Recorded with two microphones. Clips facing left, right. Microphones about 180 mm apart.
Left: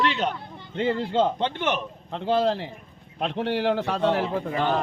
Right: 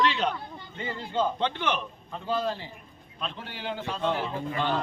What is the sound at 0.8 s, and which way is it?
Speech, 70° left (ahead or behind).